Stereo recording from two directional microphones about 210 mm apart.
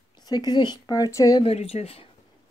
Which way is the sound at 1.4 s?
30° left (ahead or behind).